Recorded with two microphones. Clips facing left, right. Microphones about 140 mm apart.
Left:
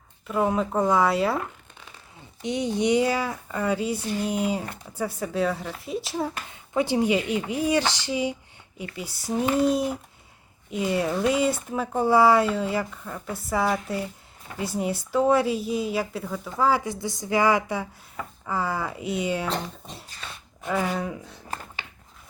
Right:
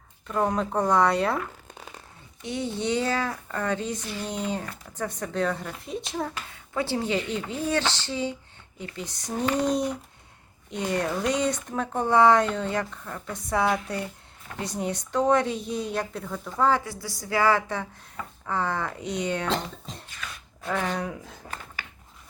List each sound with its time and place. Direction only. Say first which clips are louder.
0.3 s speech: left 2 dB; 5° left (ahead or behind)
2.4 s speech: left 5 dB; 15° left (ahead or behind)
6.5 s speech: left 6 dB; 15° left (ahead or behind)
16.8 s a woman's voice: left 6 dB; 20° left (ahead or behind)
20.1 s a sound: even; 30° left (ahead or behind)
20.7 s speech: left 2 dB; 5° left (ahead or behind)